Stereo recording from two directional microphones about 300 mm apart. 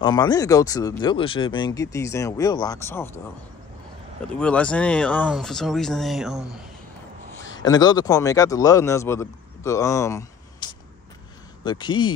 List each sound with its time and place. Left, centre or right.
0.0 s speech: centre
4.2 s speech: centre
7.5 s speech: centre